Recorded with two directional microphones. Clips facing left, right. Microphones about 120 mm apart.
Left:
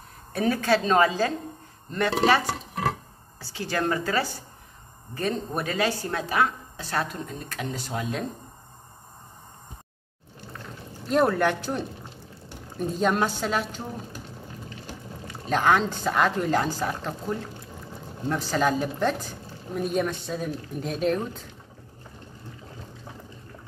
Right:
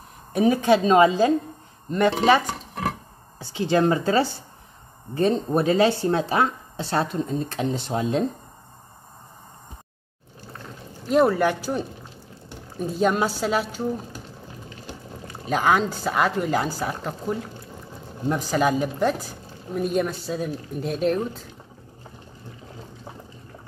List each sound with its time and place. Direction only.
0.3 s speech: 15° right (ahead or behind)
11.1 s a woman's voice: 5° right (ahead or behind)
15.4 s a woman's voice: 5° right (ahead or behind)